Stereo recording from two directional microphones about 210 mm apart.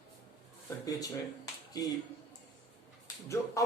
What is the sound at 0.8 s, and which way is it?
Speech, 15° left (ahead or behind).